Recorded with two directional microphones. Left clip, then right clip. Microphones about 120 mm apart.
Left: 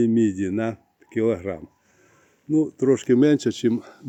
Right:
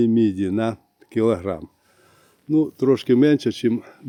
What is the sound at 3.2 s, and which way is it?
Speech, 10° right (ahead or behind).